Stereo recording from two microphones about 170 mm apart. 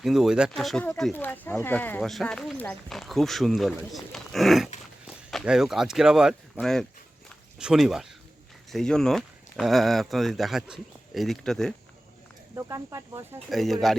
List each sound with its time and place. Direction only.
0.0 s speech: centre (ahead or behind)
12.5 s speech: 15° right (ahead or behind)
13.5 s speech: centre (ahead or behind)